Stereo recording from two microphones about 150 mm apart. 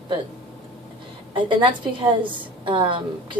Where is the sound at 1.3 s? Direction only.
35° right (ahead or behind).